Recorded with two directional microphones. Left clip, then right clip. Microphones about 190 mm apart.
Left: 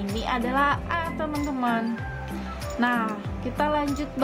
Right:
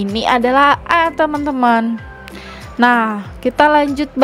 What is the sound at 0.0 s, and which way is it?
A woman's voice, 50° right (ahead or behind).